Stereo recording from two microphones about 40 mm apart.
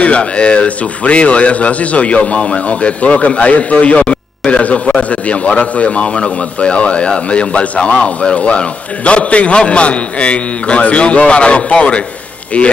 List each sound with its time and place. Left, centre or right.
0.0 s a man's voice: left